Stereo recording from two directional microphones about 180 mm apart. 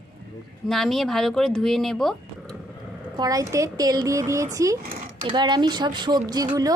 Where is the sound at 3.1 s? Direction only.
20° right (ahead or behind).